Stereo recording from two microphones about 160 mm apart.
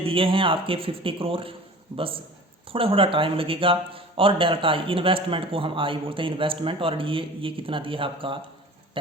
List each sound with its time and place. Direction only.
0.0 s speech: 35° right (ahead or behind)